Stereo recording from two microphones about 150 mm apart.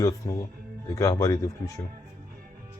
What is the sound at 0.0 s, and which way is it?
Speech, 20° left (ahead or behind).